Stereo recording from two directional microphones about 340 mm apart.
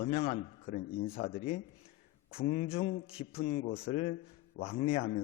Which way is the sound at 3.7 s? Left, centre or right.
Centre.